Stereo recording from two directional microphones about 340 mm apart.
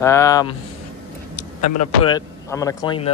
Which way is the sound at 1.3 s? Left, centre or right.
Centre.